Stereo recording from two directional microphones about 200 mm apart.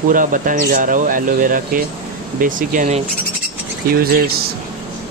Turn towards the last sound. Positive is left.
turn(degrees=-50)  # may be behind; listen again after turning